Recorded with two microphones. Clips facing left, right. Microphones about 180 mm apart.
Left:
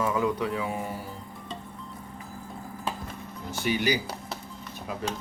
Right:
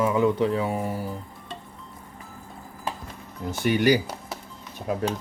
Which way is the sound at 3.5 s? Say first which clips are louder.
Right 6 dB; 55° right (ahead or behind).